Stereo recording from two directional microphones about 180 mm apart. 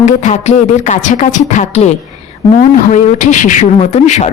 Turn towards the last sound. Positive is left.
turn(degrees=40)  # may be behind; listen again after turning